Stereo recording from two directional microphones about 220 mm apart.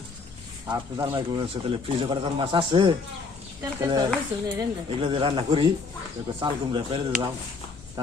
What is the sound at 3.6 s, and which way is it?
Stir, 15° right (ahead or behind).